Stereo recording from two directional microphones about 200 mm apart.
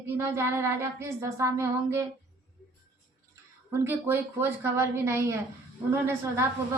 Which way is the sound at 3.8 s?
10° right (ahead or behind).